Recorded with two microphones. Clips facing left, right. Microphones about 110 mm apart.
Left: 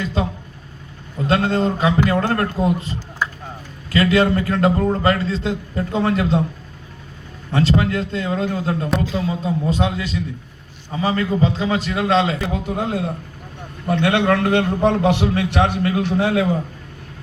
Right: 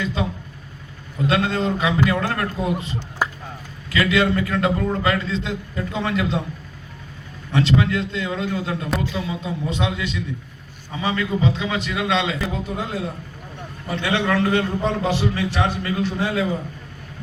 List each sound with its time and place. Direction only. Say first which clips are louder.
0.0 s a sound: left 2 dB; 35° left (ahead or behind)
1.3 s a man's voice: left 3 dB; 35° left (ahead or behind)
7.5 s a man's voice: left 1 dB; 40° left (ahead or behind)
12.6 s a man's voice: left 4 dB; 55° left (ahead or behind)